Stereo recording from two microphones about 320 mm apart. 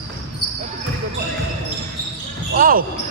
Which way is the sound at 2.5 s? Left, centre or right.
Right.